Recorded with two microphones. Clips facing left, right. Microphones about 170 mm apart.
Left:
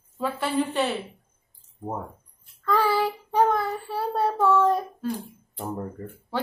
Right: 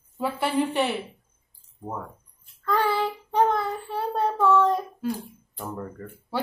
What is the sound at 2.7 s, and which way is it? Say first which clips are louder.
Child singing: left 1 dB; 5° left (ahead or behind).